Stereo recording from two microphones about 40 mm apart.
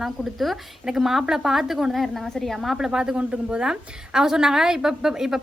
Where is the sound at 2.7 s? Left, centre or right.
Centre.